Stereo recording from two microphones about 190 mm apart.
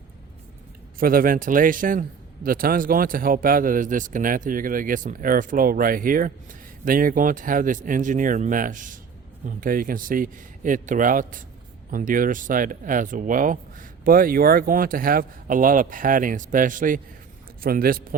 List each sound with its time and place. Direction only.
0.9 s a man's voice: 50° right (ahead or behind)